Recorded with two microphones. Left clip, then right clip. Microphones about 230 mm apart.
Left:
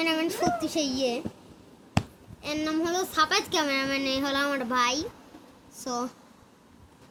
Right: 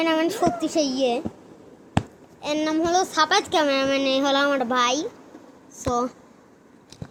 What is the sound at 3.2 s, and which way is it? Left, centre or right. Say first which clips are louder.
A child's voice: right 6 dB; centre.